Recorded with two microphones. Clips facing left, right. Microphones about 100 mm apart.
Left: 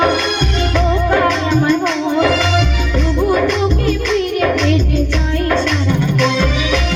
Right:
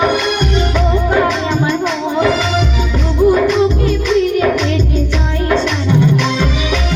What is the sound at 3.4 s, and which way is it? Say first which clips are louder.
Music: right 3 dB; 15° right (ahead or behind).